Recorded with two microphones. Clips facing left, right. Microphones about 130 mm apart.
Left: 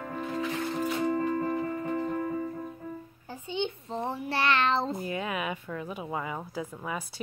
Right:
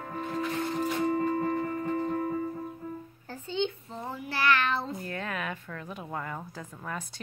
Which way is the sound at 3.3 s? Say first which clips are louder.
Right 1 dB; 15° left (ahead or behind).